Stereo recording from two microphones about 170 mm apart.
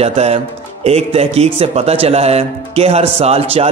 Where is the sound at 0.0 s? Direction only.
35° right (ahead or behind).